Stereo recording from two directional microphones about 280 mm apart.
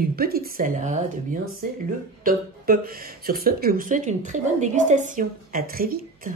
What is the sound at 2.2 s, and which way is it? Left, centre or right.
Speech, right.